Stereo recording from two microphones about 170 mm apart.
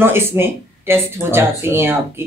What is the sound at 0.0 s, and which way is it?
Speech, 15° right (ahead or behind).